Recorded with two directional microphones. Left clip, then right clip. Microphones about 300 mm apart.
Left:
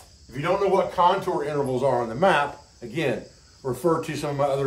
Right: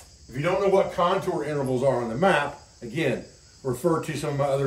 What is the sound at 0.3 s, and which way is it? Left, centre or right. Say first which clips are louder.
Speech: even; centre.